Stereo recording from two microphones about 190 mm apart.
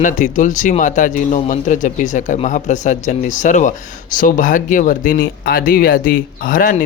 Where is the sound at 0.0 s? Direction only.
40° left (ahead or behind).